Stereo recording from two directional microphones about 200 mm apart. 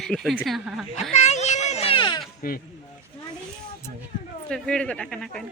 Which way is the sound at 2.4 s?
45° left (ahead or behind).